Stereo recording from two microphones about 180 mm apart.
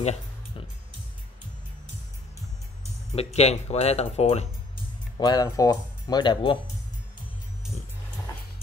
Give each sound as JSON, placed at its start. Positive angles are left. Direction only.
{"t": 0.0, "sound": "music", "side_deg": 35}
{"t": 3.1, "sound": "speech", "side_deg": 35}
{"t": 5.2, "sound": "speech", "side_deg": 20}